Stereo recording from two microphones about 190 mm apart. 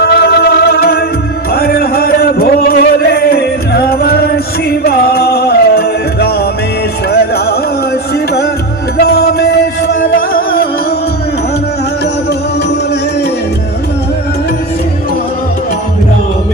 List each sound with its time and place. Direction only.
0.0 s music: 55° left (ahead or behind)
1.5 s a sound: 55° left (ahead or behind)
4.8 s music: 55° left (ahead or behind)
9.0 s music: 55° left (ahead or behind)